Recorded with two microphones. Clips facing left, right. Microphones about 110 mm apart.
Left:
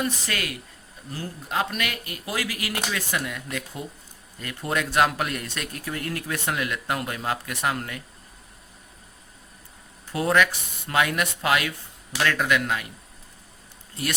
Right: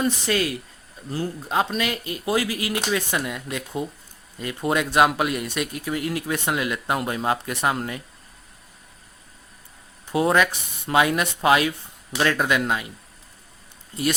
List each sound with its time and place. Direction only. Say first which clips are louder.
0.0 s speech: right 6 dB; 25° right (ahead or behind)
10.1 s speech: right 2 dB; 20° right (ahead or behind)